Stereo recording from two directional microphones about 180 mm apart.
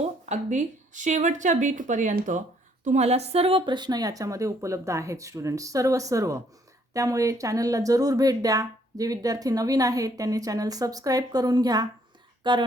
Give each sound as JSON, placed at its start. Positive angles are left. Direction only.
{"t": 0.0, "sound": "speech", "side_deg": -40}